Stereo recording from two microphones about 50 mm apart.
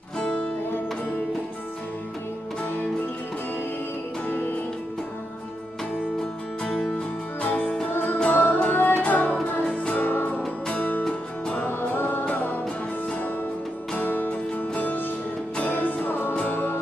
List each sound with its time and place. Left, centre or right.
0.2 s music: left
6.6 s music: centre
7.4 s music: left
10.0 s music: left
11.1 s music: centre
11.8 s music: left
13.9 s music: left
15.7 s music: left